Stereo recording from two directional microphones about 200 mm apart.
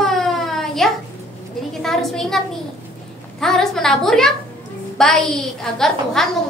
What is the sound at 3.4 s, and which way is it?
A woman's voice, centre (ahead or behind).